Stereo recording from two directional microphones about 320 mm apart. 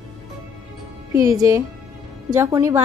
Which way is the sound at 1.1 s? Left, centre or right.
Centre.